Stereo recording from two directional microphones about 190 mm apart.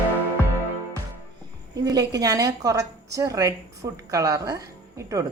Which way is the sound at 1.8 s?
20° right (ahead or behind).